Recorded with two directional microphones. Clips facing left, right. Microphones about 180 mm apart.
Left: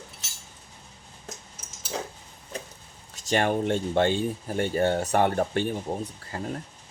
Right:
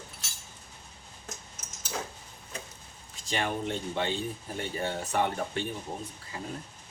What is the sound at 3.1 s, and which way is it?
Speech, 45° left (ahead or behind).